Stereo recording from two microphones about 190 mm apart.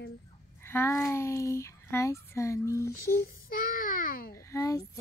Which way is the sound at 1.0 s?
15° left (ahead or behind).